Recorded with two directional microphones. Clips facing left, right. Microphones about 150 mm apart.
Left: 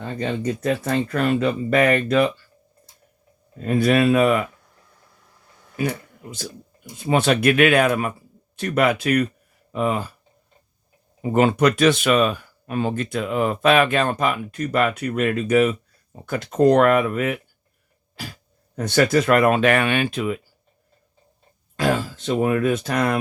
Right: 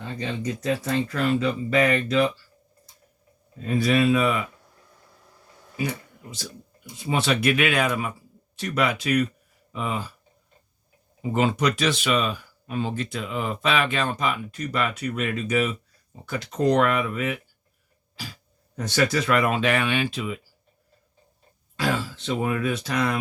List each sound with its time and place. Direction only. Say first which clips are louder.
0.0 s speech: left 5 dB; 55° left (ahead or behind)
3.6 s speech: left 4 dB; 55° left (ahead or behind)
6.9 s speech: left 5 dB; 50° left (ahead or behind)
11.2 s speech: left 6 dB; 60° left (ahead or behind)
18.8 s speech: left 5 dB; 55° left (ahead or behind)
21.8 s speech: left 5 dB; 55° left (ahead or behind)